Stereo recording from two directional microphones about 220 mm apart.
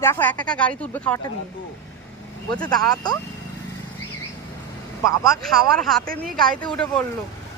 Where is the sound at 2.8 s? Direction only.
15° left (ahead or behind).